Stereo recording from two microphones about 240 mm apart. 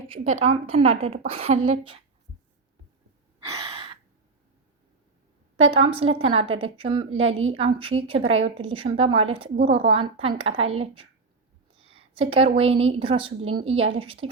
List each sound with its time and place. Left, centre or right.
0.4 s a woman's voice: right
3.5 s gasp: centre
5.5 s a woman's voice: right